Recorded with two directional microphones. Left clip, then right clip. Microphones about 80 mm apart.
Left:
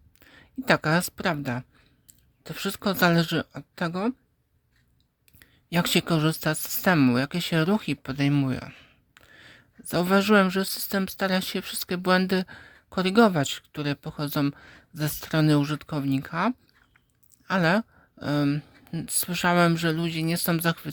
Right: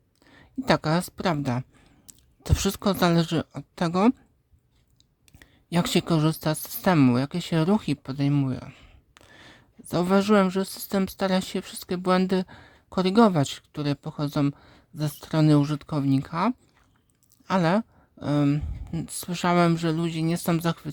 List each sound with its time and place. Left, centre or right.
0.3 s a sound: right
0.8 s speech: centre
1.4 s a woman's voice: right
2.0 s a sound: right
2.6 s a woman's voice: right
2.8 s speech: right
5.4 s speech: right
8.0 s speech: centre
9.1 s a sound: right
9.9 s a woman's voice: centre
14.5 s speech: centre